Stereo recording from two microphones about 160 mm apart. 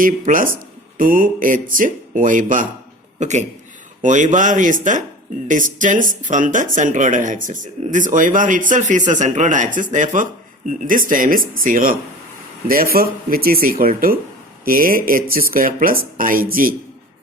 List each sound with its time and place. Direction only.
0.0 s speech: 60° right (ahead or behind)